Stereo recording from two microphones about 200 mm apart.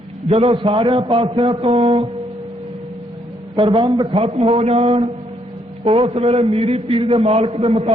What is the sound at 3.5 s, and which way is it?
A man's voice, 25° right (ahead or behind).